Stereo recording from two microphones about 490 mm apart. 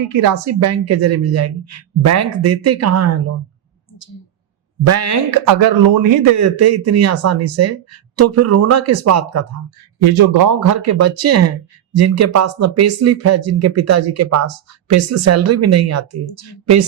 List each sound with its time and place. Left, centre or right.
0.2 s a woman's voice: right
4.9 s speech: right
5.6 s speech: right
10.0 s speech: right
16.2 s a woman's voice: left